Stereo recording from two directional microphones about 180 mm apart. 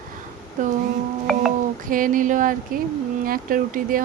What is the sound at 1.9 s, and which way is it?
Speech, 50° right (ahead or behind).